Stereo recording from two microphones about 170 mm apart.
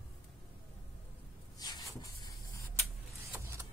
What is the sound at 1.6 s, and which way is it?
Cupboard open or close, 20° left (ahead or behind).